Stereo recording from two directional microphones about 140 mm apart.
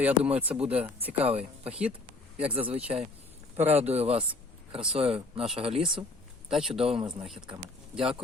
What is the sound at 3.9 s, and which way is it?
Speech, 45° right (ahead or behind).